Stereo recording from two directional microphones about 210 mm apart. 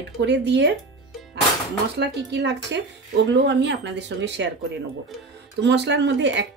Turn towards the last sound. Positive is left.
turn(degrees=-55)  # may be behind; listen again after turning